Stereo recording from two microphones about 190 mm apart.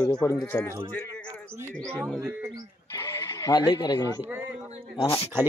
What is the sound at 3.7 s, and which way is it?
Speech, 20° left (ahead or behind).